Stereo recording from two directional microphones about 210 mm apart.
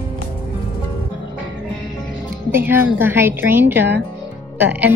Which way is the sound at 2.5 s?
10° right (ahead or behind).